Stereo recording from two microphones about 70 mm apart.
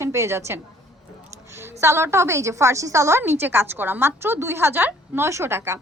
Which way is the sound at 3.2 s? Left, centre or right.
Right.